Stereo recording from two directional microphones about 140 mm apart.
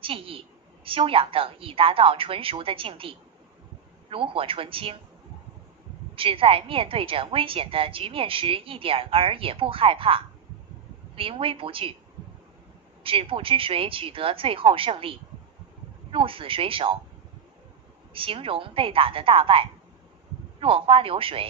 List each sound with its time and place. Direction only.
0.0 s a woman's voice: 40° right (ahead or behind)
6.1 s a woman's voice: 40° right (ahead or behind)
13.0 s a woman's voice: 40° right (ahead or behind)
18.1 s a woman's voice: 40° right (ahead or behind)